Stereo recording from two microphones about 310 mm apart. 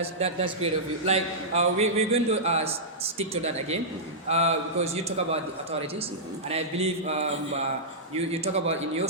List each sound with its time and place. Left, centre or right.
0.0 s a man's voice: centre
6.5 s a man's voice: centre